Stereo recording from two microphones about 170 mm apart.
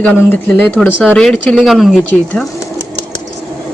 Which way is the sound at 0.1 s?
10° left (ahead or behind).